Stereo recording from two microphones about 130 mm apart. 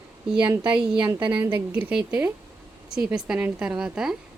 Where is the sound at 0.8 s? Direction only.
5° right (ahead or behind).